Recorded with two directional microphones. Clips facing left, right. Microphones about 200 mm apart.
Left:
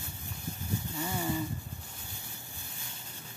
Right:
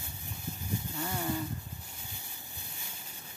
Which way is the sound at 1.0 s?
5° left (ahead or behind).